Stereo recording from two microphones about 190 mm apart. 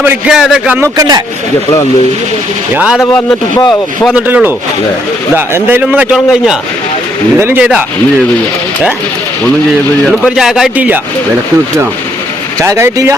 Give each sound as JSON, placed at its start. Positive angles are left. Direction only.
{"t": 0.0, "sound": "speech", "side_deg": -5}
{"t": 0.9, "sound": "speech", "side_deg": -20}
{"t": 2.7, "sound": "speech", "side_deg": -5}
{"t": 3.0, "sound": "a man's voice", "side_deg": 10}
{"t": 3.6, "sound": "speech", "side_deg": 20}
{"t": 4.1, "sound": "speech", "side_deg": -10}
{"t": 10.1, "sound": "speech", "side_deg": 0}
{"t": 12.6, "sound": "speech", "side_deg": -15}